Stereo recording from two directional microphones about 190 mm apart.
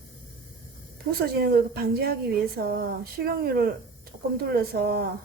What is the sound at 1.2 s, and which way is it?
A woman's voice, 55° right (ahead or behind).